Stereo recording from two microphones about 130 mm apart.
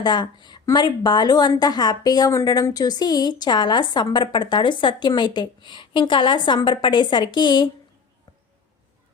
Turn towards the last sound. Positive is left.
turn(degrees=35)  # may be behind; listen again after turning